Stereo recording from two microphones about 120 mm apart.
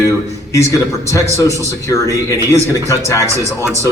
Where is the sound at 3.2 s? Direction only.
25° right (ahead or behind).